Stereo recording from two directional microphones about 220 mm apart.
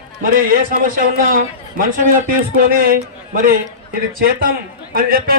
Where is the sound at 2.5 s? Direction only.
40° right (ahead or behind).